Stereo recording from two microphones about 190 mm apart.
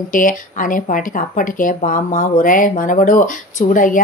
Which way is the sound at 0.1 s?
45° left (ahead or behind).